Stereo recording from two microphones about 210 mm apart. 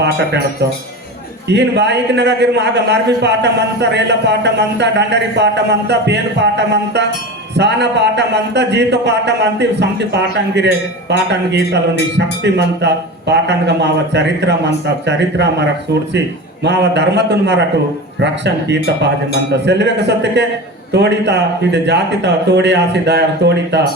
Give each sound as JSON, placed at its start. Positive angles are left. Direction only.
{"t": 1.5, "sound": "a man's voice", "side_deg": -55}
{"t": 16.6, "sound": "a man's voice", "side_deg": -55}
{"t": 20.9, "sound": "a man's voice", "side_deg": -55}